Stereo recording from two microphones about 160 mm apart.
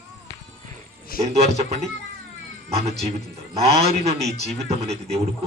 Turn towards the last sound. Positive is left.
turn(degrees=-40)  # may be behind; listen again after turning